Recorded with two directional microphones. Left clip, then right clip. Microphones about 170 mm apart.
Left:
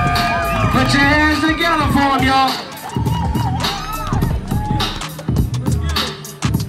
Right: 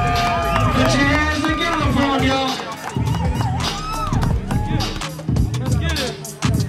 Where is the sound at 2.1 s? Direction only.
20° left (ahead or behind).